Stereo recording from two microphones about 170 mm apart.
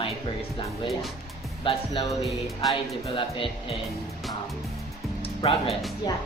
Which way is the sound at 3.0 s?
30° left (ahead or behind).